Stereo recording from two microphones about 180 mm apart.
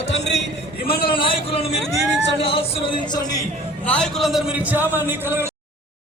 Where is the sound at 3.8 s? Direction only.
5° left (ahead or behind); by 5.5 s 15° right (ahead or behind).